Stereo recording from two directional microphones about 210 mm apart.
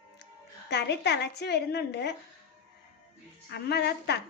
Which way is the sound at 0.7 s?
55° left (ahead or behind).